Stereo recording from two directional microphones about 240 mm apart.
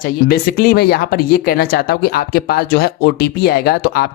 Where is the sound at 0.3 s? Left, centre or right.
Left.